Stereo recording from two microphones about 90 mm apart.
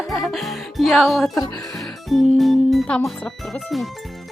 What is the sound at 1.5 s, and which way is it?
Music, 5° left (ahead or behind).